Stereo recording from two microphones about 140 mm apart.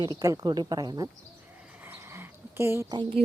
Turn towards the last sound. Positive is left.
turn(degrees=-35)  # may be behind; listen again after turning